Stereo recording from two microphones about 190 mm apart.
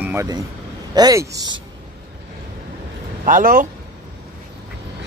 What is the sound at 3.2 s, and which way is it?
Speech, 45° right (ahead or behind).